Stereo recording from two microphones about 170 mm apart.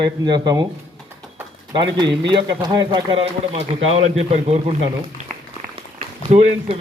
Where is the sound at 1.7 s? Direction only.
25° right (ahead or behind).